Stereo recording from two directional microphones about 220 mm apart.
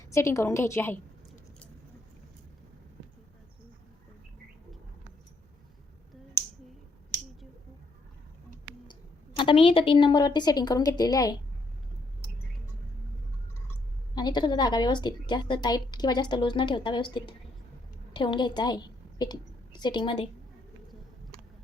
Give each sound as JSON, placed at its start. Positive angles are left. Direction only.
{"t": 0.1, "sound": "a woman's voice", "side_deg": 15}
{"t": 9.4, "sound": "a woman's voice", "side_deg": 25}
{"t": 14.2, "sound": "a woman's voice", "side_deg": 20}